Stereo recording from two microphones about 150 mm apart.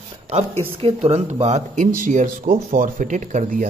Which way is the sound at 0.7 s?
40° right (ahead or behind).